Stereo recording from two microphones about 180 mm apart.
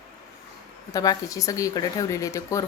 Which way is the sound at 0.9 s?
20° left (ahead or behind).